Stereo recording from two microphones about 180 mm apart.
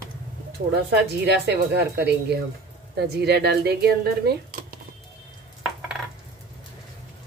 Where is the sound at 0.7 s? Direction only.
65° right (ahead or behind).